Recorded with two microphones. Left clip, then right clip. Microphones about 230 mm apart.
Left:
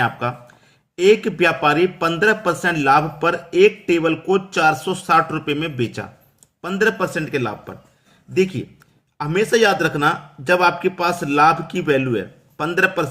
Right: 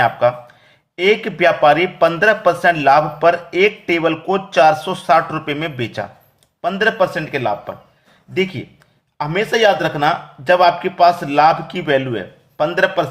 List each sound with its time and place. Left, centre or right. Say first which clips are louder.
0.0 s a man's voice: right 7 dB; centre